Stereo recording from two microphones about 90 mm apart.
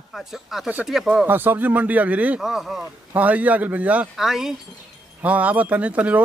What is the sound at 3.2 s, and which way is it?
Speech, 15° right (ahead or behind).